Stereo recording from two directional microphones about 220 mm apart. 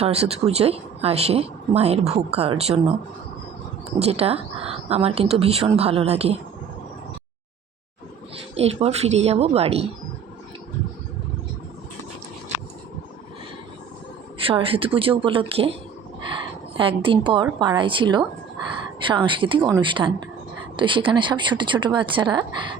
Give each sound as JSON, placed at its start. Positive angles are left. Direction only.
{"t": 0.0, "sound": "speech", "side_deg": -30}
{"t": 3.9, "sound": "speech", "side_deg": -30}
{"t": 8.5, "sound": "speech", "side_deg": -30}
{"t": 14.4, "sound": "speech", "side_deg": -25}
{"t": 16.7, "sound": "speech", "side_deg": -25}